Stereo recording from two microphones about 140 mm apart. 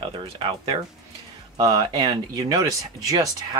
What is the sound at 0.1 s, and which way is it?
Speech, 35° right (ahead or behind).